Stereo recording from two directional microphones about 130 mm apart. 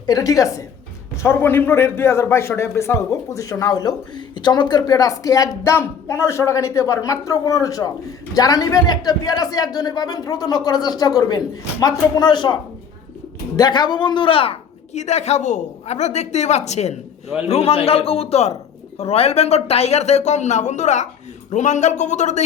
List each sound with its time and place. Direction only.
0.0 s a man's voice: 30° left (ahead or behind)
13.6 s a woman's voice: 35° left (ahead or behind); by 22.4 s 65° left (ahead or behind)